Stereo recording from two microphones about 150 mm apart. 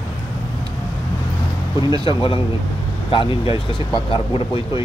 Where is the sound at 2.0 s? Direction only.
35° left (ahead or behind).